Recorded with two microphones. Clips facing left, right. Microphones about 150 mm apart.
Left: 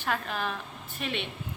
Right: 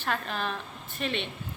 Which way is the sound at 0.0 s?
10° left (ahead or behind).